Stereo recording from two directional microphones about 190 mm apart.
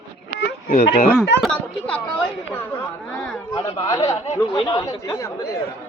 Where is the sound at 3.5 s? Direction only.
20° left (ahead or behind).